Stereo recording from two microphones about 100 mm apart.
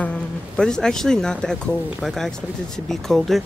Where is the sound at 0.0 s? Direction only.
10° left (ahead or behind).